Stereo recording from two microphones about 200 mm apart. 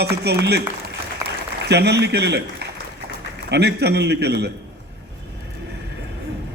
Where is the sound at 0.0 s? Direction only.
55° right (ahead or behind).